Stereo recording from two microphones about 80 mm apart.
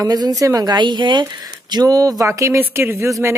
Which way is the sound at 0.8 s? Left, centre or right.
Right.